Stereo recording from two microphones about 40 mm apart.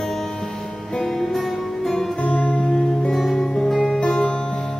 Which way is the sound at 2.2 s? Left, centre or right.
Left.